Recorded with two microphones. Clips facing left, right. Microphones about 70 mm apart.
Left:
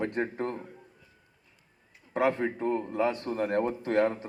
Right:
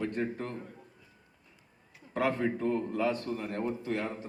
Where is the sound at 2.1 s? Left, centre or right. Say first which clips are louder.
Left 3 dB; left.